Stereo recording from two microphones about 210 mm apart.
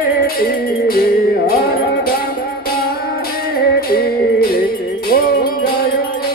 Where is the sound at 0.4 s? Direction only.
45° left (ahead or behind).